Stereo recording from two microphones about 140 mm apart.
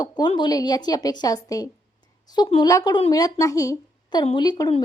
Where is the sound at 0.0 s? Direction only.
30° left (ahead or behind).